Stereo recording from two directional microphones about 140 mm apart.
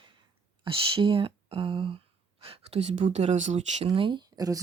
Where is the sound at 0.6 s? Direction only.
40° right (ahead or behind); by 3.8 s 55° right (ahead or behind).